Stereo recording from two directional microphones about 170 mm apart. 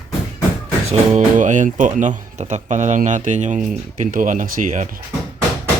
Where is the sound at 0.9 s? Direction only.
45° right (ahead or behind).